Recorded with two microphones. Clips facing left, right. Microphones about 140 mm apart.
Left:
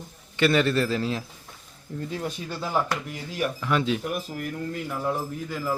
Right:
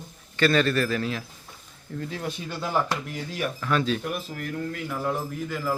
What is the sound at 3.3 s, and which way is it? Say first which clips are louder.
Speech: left 1 dB; 15° left (ahead or behind).